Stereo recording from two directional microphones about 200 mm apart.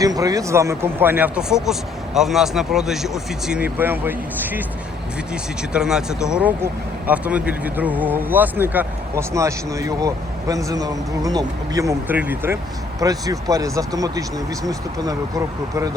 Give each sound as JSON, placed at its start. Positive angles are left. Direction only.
{"t": 0.0, "sound": "speech", "side_deg": -15}